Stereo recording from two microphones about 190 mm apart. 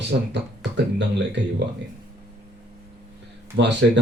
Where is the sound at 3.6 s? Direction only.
65° right (ahead or behind).